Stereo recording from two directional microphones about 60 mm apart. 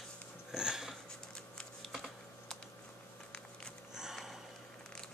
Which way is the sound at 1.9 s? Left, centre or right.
Centre.